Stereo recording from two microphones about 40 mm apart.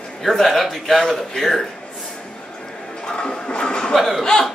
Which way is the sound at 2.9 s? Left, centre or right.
Left.